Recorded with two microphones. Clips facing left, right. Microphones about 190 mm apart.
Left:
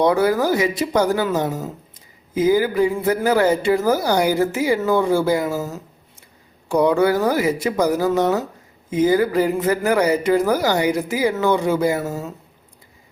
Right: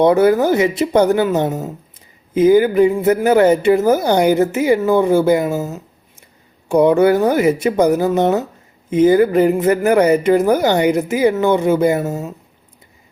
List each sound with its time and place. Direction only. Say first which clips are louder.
0.0 s a woman's voice: right 5 dB; 20° right (ahead or behind)